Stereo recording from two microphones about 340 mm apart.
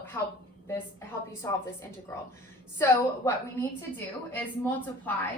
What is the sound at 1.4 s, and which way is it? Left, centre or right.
Speech, centre.